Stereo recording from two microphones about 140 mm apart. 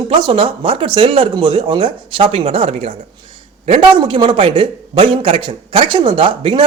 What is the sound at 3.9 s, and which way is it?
A man's voice, 35° right (ahead or behind).